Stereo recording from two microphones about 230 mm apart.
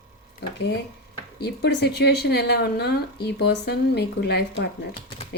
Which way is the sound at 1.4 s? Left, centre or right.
Left.